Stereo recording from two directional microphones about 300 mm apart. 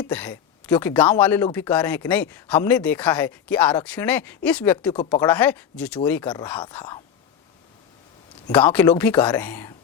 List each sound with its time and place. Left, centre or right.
0.0 s speech: centre
8.5 s speech: centre